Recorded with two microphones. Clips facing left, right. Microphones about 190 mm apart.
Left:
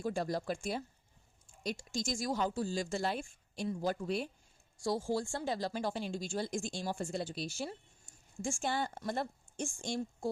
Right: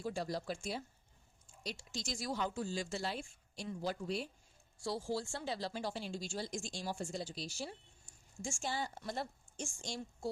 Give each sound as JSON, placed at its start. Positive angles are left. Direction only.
{"t": 0.0, "sound": "speech", "side_deg": 50}